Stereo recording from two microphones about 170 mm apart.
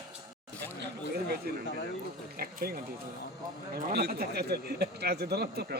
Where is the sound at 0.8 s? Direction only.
70° right (ahead or behind).